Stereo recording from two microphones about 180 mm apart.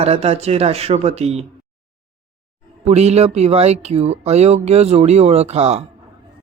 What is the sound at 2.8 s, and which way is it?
Speech, 35° right (ahead or behind).